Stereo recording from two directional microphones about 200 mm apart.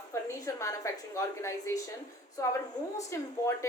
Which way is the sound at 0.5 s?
15° left (ahead or behind).